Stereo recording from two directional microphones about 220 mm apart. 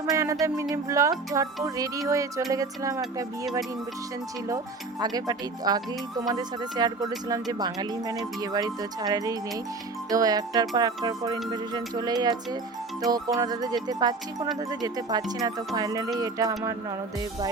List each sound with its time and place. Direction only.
0.0 s speech: 15° right (ahead or behind)